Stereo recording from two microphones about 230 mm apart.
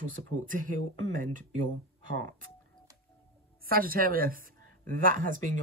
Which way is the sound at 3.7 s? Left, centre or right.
Right.